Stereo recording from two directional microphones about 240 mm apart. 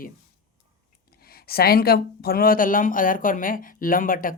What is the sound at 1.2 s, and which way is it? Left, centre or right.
Speech, left.